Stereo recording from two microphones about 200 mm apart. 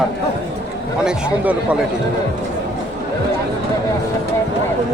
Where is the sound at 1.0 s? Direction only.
5° right (ahead or behind).